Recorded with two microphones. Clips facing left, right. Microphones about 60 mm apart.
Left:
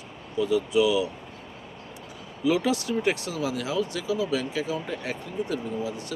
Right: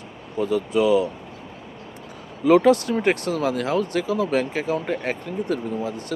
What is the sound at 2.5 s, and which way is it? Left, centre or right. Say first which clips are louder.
Speech: right 8 dB; right.